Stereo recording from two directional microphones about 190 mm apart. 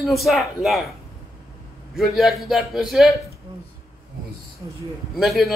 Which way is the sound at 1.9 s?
Centre (ahead or behind).